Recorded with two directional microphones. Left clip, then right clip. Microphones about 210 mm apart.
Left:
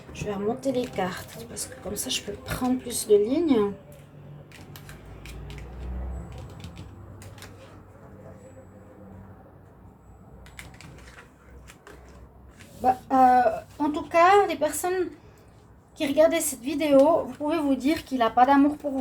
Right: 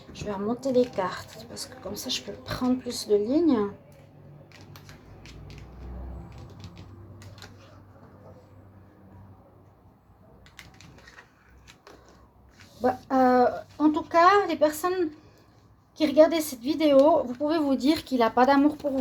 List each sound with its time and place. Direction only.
0.1 s speech: 30° right (ahead or behind)
12.8 s speech: 30° right (ahead or behind)